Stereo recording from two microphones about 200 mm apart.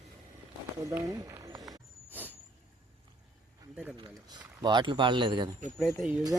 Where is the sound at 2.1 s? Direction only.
10° right (ahead or behind).